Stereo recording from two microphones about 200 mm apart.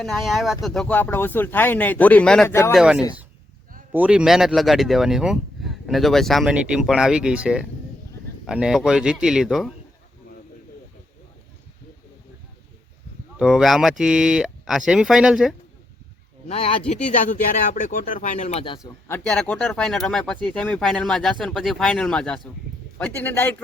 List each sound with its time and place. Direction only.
0.0 s speech: centre (ahead or behind)
2.7 s speech: 5° right (ahead or behind)
13.3 s speech: 5° right (ahead or behind)
16.5 s speech: 30° left (ahead or behind)
16.9 s speech: 40° left (ahead or behind); by 23.6 s 10° left (ahead or behind)